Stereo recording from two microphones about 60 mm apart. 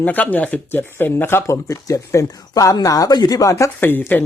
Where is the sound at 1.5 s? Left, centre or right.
Left.